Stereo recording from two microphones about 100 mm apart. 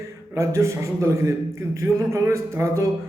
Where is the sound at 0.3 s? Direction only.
30° right (ahead or behind).